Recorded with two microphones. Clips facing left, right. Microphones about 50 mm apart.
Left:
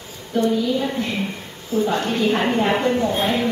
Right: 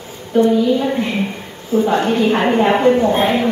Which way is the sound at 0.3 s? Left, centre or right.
Centre.